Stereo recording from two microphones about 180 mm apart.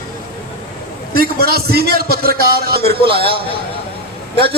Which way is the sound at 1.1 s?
60° right (ahead or behind).